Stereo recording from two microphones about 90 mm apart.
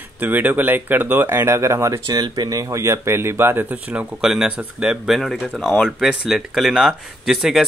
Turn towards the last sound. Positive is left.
turn(degrees=-5)  # may be behind; listen again after turning